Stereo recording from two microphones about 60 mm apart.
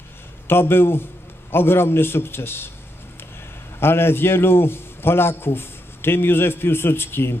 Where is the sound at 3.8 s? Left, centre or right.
Left.